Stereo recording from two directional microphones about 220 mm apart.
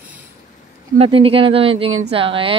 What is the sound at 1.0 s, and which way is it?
Speech, 25° right (ahead or behind).